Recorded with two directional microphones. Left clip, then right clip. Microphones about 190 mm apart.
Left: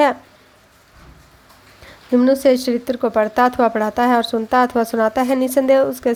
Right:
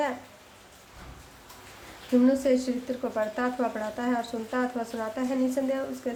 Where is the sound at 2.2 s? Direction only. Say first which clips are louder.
Left 10 dB; 45° left (ahead or behind).